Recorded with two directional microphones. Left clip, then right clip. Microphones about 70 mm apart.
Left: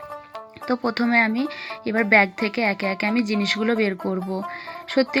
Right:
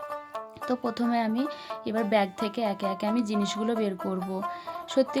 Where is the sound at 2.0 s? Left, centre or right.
Left.